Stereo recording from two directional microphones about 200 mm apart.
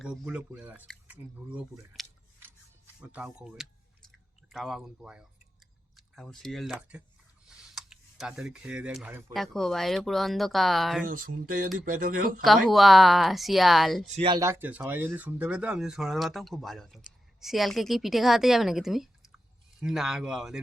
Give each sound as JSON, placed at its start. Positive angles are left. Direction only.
{"t": 0.0, "sound": "speech", "side_deg": -5}
{"t": 2.4, "sound": "a sound", "side_deg": -10}
{"t": 4.4, "sound": "speech", "side_deg": 0}
{"t": 7.4, "sound": "a sound", "side_deg": 0}
{"t": 9.3, "sound": "speech", "side_deg": 0}
{"t": 11.0, "sound": "speech", "side_deg": -45}
{"t": 12.4, "sound": "speech", "side_deg": 0}
{"t": 14.2, "sound": "speech", "side_deg": -20}